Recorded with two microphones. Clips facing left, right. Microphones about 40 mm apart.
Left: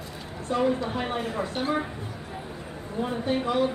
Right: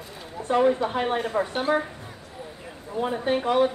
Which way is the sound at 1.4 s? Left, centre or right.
Centre.